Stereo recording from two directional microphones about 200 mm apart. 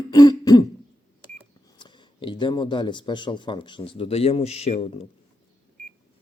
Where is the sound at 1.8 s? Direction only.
25° left (ahead or behind).